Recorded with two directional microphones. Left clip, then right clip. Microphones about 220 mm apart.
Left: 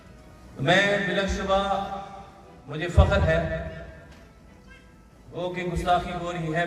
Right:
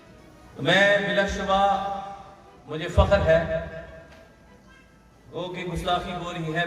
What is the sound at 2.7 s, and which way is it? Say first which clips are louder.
Speech: right 3 dB; 45° right (ahead or behind).